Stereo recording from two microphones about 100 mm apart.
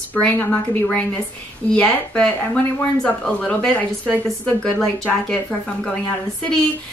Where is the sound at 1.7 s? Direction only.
15° left (ahead or behind).